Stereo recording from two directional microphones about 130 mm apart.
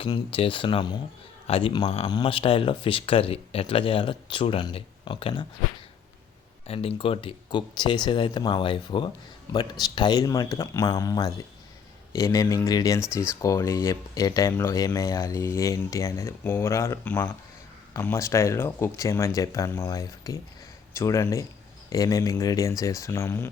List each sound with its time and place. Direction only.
0.0 s speech: 45° left (ahead or behind)
6.7 s speech: 45° left (ahead or behind); by 23.5 s 20° left (ahead or behind)